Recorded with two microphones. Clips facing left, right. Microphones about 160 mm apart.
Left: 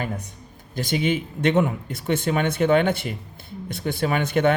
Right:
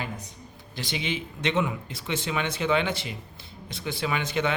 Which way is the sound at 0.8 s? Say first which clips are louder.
Left 8 dB; 50° left (ahead or behind).